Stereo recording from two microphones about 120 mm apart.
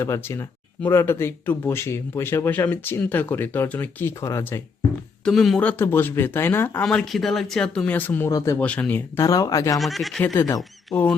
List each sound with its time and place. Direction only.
0.0 s speech: 20° left (ahead or behind)
5.2 s speech: centre (ahead or behind); by 6.8 s 20° left (ahead or behind)
6.8 s speech: 5° left (ahead or behind)
8.3 s speech: 30° left (ahead or behind)
8.5 s speech: 10° left (ahead or behind)
9.2 s speech: 30° left (ahead or behind)
9.7 s speech: centre (ahead or behind)
10.2 s speech: 30° left (ahead or behind)